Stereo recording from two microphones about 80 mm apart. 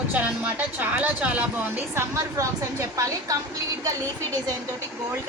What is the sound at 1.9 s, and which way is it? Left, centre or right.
A woman's voice, right.